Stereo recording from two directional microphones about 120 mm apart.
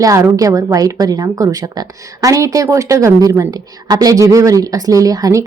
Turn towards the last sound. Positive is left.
turn(degrees=-30)  # may be behind; listen again after turning